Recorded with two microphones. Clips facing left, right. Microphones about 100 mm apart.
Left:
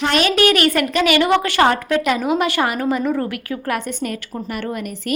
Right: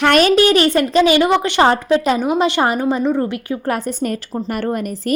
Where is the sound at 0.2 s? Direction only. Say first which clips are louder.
Right 4 dB; 35° right (ahead or behind).